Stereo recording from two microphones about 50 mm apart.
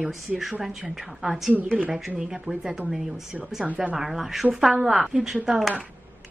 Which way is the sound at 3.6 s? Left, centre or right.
Right.